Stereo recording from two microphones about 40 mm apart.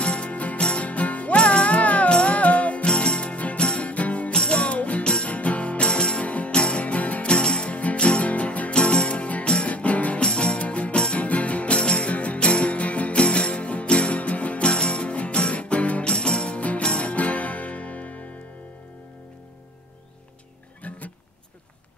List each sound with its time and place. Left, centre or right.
0.0 s music: left
0.6 s music: left
0.8 s music: left
2.9 s music: left
4.3 s music: left
5.0 s music: left
5.3 s music: left
7.2 s music: left
8.7 s music: left
10.2 s music: left
16.0 s music: left
20.9 s music: left